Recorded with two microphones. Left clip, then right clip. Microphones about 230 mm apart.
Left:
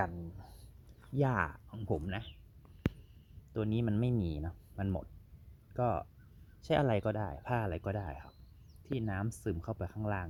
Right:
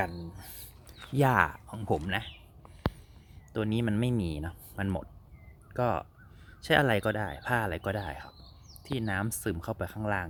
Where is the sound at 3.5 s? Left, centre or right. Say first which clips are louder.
Right 5 dB; centre.